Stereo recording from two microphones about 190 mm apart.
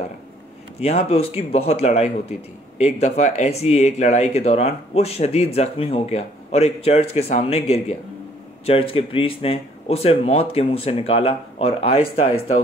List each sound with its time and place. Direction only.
0.7 s speech: 35° left (ahead or behind)